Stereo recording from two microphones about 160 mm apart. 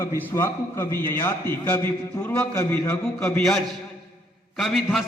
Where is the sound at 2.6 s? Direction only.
15° left (ahead or behind); by 5.0 s centre (ahead or behind).